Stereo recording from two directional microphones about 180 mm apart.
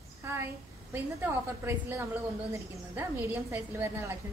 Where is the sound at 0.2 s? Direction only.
15° right (ahead or behind).